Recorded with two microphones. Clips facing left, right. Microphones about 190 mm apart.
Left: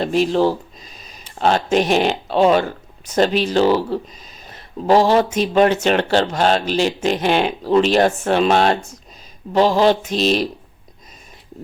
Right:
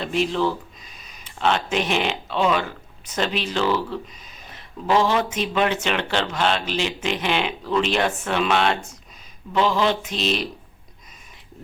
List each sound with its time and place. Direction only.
0.0 s speech: 40° left (ahead or behind)